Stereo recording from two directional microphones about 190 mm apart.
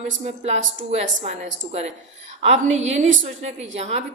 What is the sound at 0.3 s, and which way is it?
A woman's voice, 35° right (ahead or behind).